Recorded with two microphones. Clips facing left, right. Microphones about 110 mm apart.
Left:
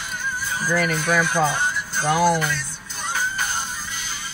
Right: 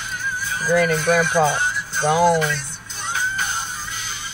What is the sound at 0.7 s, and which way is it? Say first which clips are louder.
Speech: right 5 dB; 25° right (ahead or behind).